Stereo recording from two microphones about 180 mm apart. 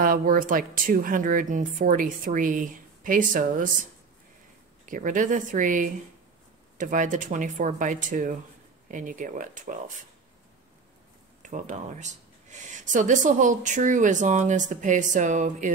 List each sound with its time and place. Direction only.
0.0 s speech: 50° right (ahead or behind)
4.8 s speech: 45° right (ahead or behind)
11.4 s speech: 45° right (ahead or behind)